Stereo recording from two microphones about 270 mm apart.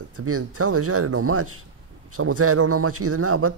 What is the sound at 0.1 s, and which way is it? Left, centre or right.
A man's voice, right.